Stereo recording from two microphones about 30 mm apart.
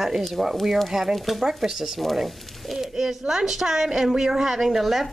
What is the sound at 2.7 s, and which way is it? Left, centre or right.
A woman's voice, centre.